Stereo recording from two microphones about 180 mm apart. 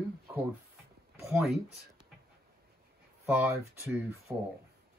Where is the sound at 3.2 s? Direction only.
10° right (ahead or behind).